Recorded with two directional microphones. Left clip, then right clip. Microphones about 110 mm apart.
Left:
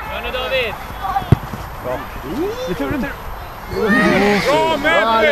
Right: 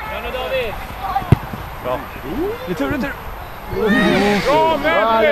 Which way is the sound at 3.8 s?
25° left (ahead or behind).